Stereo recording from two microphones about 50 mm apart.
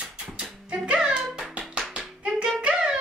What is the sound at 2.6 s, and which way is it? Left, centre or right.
Music, centre.